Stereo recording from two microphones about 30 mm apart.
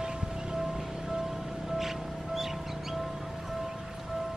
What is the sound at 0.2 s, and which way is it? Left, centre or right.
Music, right.